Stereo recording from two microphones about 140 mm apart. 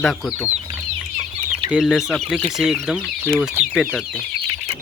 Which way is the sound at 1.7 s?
5° right (ahead or behind).